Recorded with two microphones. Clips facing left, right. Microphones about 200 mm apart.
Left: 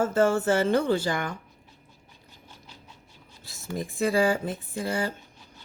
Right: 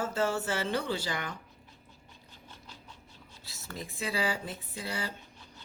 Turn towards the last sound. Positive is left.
turn(degrees=50)  # may be behind; listen again after turning